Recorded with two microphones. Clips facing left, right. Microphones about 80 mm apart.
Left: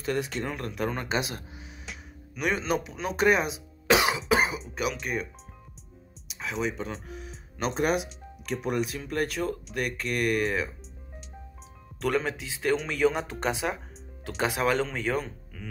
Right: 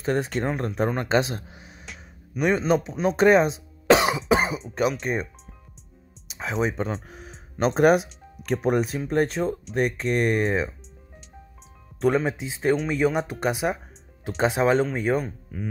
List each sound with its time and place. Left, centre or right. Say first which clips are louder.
0.0 s speech: right 5 dB; right
2.3 s a man's voice: right 6 dB; centre
2.8 s speech: right 6 dB; right
6.6 s speech: right 6 dB; right
12.0 s speech: right 5 dB; centre